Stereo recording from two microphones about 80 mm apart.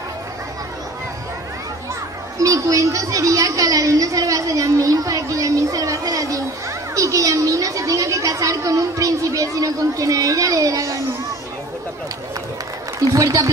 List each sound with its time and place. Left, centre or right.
2.3 s a woman's voice: right
13.1 s a woman's voice: right